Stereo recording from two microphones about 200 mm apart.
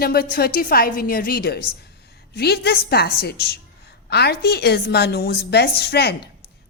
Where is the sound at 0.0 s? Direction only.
50° left (ahead or behind).